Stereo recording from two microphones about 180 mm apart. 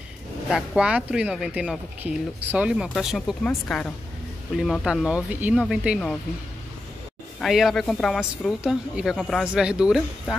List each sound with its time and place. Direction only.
0.5 s speech: 5° right (ahead or behind)
7.3 s speech: centre (ahead or behind)